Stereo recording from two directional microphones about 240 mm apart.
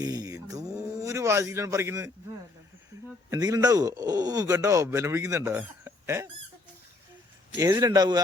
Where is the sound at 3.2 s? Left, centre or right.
Centre.